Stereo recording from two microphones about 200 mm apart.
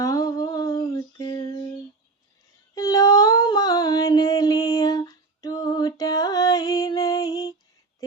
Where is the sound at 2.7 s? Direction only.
20° left (ahead or behind).